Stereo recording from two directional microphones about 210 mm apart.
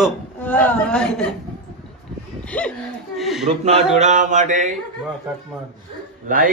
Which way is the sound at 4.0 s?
35° right (ahead or behind).